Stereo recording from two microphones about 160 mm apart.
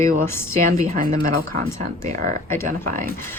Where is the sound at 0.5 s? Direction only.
60° right (ahead or behind).